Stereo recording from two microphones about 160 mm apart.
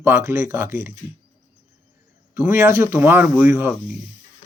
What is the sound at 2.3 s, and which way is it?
Speech, 15° right (ahead or behind).